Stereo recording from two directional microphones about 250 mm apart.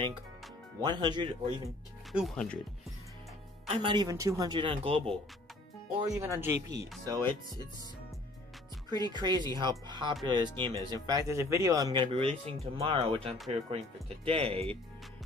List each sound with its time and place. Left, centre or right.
0.8 s speech: centre
2.1 s speech: centre
3.6 s speech: centre
9.1 s speech: centre